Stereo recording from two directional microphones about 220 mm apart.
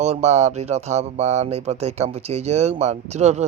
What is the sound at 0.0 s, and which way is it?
Speech, 30° right (ahead or behind).